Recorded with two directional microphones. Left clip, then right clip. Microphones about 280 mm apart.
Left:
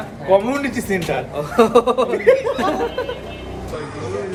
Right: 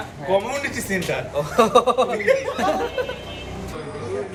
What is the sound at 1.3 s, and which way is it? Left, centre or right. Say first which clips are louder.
Speech: left 2 dB; centre.